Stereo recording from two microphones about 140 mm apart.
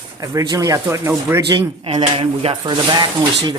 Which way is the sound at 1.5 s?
35° right (ahead or behind).